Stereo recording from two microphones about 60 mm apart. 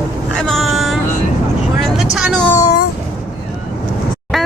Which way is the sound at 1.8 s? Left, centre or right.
Centre.